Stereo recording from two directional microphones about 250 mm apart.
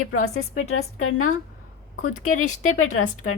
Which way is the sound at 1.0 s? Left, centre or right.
Left.